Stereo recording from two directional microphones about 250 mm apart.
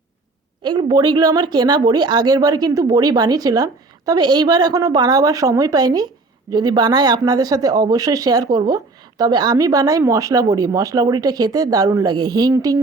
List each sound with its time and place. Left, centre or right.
0.6 s speech: centre